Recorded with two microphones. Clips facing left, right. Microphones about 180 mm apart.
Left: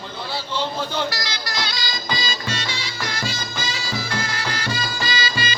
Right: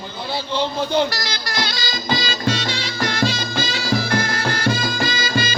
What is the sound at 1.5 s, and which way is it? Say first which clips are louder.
Music: right 4 dB; 60° right (ahead or behind).